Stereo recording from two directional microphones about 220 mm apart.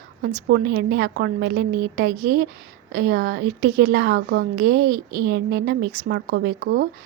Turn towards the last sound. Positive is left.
turn(degrees=-50)  # may be behind; listen again after turning